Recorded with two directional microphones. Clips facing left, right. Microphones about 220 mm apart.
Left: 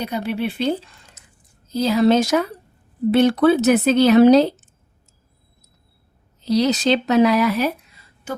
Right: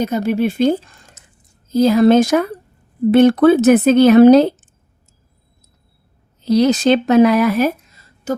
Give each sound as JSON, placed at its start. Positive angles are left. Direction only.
{"t": 0.0, "sound": "speech", "side_deg": -45}
{"t": 6.4, "sound": "speech", "side_deg": -50}